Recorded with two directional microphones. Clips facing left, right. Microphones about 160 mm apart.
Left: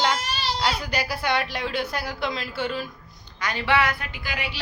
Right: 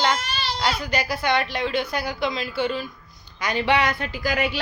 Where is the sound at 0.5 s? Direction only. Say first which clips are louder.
Right 3 dB; 5° left (ahead or behind).